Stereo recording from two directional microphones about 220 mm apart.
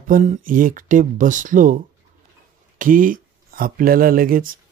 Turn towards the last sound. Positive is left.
turn(degrees=-40)  # may be behind; listen again after turning